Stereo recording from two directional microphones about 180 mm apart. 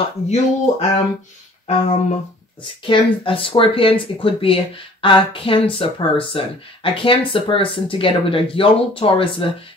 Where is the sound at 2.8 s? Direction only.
30° left (ahead or behind).